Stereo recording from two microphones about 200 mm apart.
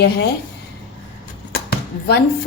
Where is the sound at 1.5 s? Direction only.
50° left (ahead or behind).